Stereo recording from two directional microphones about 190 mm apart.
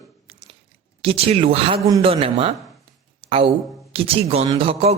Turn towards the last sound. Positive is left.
turn(degrees=-30)  # may be behind; listen again after turning